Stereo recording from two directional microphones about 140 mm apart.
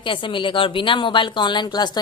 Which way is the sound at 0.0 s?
35° left (ahead or behind).